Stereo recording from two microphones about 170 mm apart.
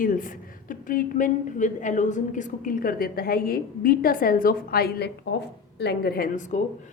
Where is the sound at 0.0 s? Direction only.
50° left (ahead or behind).